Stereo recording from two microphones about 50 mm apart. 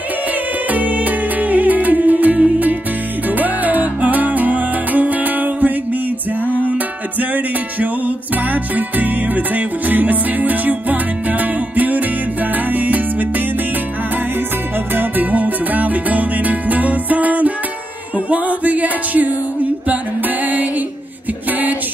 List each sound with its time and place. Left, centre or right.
0.7 s music: right
7.2 s music: right
15.0 s music: right
21.5 s music: right